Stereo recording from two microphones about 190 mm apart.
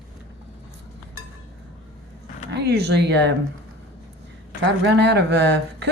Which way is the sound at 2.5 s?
60° right (ahead or behind).